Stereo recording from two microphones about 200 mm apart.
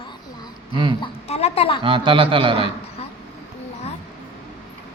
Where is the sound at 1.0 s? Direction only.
30° left (ahead or behind).